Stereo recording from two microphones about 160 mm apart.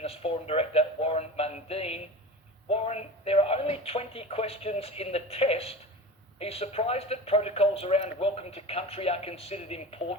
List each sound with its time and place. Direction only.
0.0 s speech: 40° left (ahead or behind)